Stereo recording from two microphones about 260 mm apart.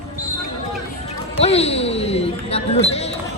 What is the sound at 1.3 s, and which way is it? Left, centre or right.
A man's voice, left.